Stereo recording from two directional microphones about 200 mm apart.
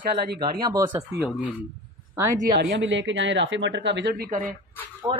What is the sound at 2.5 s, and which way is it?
Speech, 60° right (ahead or behind).